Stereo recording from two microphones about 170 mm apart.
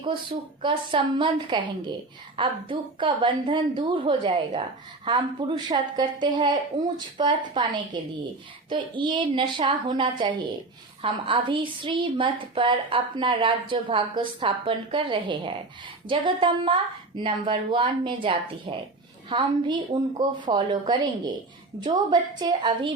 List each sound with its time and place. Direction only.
0.6 s a woman's voice: 30° right (ahead or behind)